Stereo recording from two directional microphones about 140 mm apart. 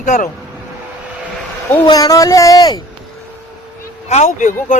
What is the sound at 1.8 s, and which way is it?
Speech, 25° left (ahead or behind).